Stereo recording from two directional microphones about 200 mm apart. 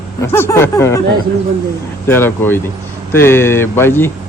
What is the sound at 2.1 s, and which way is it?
A man's voice, 10° left (ahead or behind).